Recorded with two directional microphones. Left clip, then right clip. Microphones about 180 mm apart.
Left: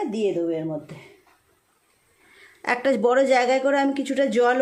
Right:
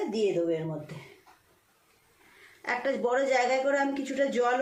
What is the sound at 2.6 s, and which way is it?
A woman's voice, 60° left (ahead or behind).